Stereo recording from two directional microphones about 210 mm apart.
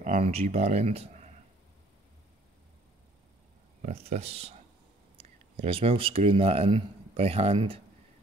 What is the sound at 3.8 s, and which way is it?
Speech, 30° right (ahead or behind).